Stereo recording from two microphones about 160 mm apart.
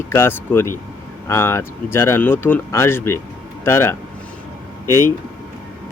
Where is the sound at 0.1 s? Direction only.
15° left (ahead or behind).